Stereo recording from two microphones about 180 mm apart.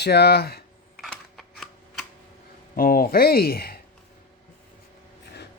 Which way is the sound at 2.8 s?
55° left (ahead or behind).